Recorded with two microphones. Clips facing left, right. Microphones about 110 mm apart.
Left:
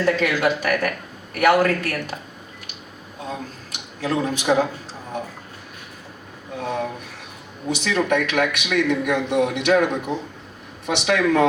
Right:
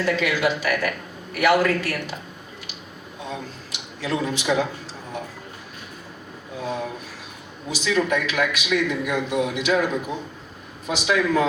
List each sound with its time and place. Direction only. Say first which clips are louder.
0.0 s speech: left 2 dB; 45° left (ahead or behind)
3.7 s speech: left 2 dB; 45° left (ahead or behind)
6.6 s a man's voice: left 2 dB; 60° left (ahead or behind)